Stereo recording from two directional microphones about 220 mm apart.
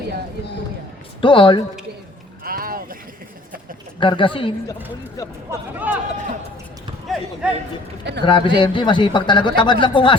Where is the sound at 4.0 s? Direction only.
20° left (ahead or behind).